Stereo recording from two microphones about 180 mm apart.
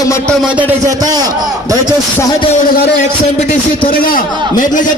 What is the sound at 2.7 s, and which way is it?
A man's voice, 60° left (ahead or behind).